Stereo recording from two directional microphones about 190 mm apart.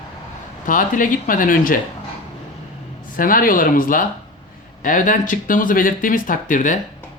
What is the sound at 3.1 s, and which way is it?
Speech, 45° left (ahead or behind).